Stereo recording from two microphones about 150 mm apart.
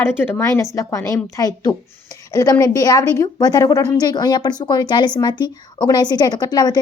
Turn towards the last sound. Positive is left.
turn(degrees=25)  # may be behind; listen again after turning